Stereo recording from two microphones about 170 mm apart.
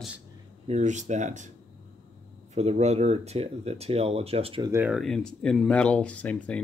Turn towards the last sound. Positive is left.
turn(degrees=10)  # may be behind; listen again after turning